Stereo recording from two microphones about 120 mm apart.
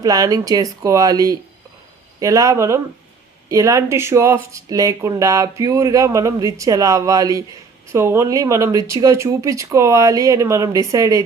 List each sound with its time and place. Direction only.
0.0 s speech: 30° right (ahead or behind)